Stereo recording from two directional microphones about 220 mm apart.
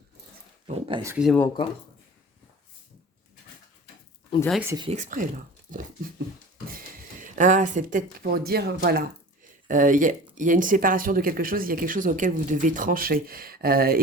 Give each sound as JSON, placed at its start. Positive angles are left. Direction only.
{"t": 0.7, "sound": "speech", "side_deg": -25}
{"t": 1.0, "sound": "speech", "side_deg": -5}
{"t": 4.4, "sound": "speech", "side_deg": 5}
{"t": 4.6, "sound": "speech", "side_deg": -15}
{"t": 4.9, "sound": "speech", "side_deg": -35}
{"t": 6.7, "sound": "speech", "side_deg": -40}